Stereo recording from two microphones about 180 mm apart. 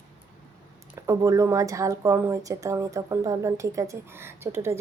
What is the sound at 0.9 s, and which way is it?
Speech, 15° right (ahead or behind).